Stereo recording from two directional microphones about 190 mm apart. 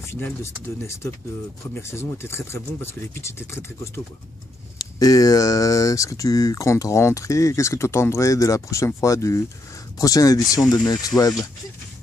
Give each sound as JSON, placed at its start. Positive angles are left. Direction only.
{"t": 0.0, "sound": "speech", "side_deg": 15}